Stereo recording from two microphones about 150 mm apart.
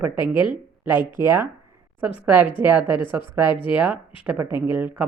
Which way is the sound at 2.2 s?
10° right (ahead or behind).